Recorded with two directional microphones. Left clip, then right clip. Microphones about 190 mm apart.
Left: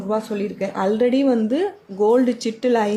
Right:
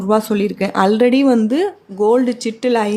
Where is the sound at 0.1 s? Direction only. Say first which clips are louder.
Right 7 dB; 25° right (ahead or behind).